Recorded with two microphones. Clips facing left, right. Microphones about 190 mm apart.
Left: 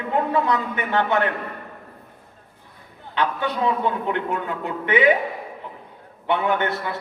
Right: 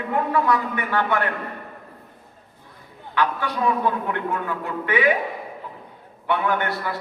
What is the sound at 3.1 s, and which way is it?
A man's voice, 20° left (ahead or behind).